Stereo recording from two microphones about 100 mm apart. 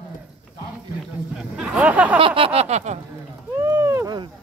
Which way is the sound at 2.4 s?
85° right.